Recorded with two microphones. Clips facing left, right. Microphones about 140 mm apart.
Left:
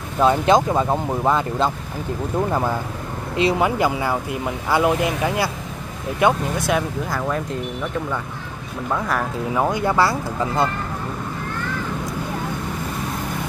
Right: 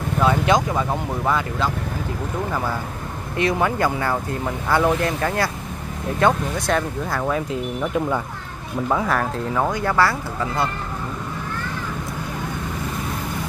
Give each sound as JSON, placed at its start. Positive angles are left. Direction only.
{"t": 0.2, "sound": "speech", "side_deg": 25}
{"t": 3.4, "sound": "speech", "side_deg": 15}
{"t": 8.9, "sound": "speech", "side_deg": 0}
{"t": 9.5, "sound": "speech", "side_deg": 10}